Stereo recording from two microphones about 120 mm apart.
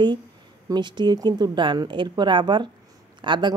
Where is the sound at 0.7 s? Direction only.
40° right (ahead or behind).